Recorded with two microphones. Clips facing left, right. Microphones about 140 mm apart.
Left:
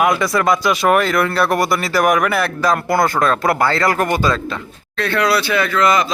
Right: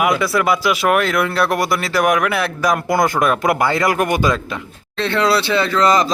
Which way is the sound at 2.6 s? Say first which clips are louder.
Even; 15° right (ahead or behind).